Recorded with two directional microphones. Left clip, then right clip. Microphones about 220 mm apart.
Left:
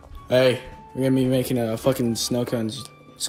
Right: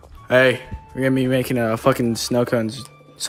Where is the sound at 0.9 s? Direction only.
35° right (ahead or behind).